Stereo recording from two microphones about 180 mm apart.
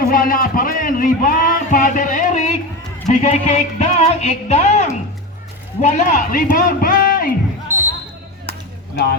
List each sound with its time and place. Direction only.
0.1 s a man's voice: 50° left (ahead or behind)
7.7 s basketball bounce: 15° right (ahead or behind)